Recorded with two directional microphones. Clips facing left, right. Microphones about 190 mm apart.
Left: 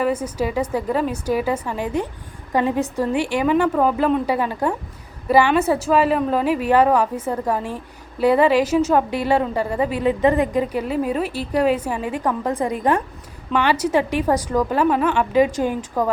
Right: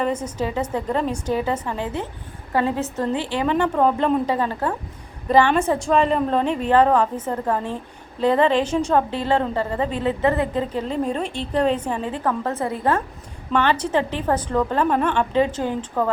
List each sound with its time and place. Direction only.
0.0 s a woman's voice: 10° left (ahead or behind)